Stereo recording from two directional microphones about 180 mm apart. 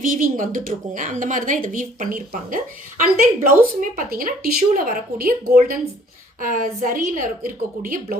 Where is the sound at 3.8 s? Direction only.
50° right (ahead or behind).